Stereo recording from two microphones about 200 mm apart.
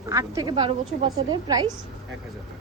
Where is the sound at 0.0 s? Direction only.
15° right (ahead or behind).